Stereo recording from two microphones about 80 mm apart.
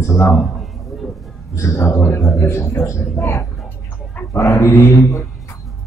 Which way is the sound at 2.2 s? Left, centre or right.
Left.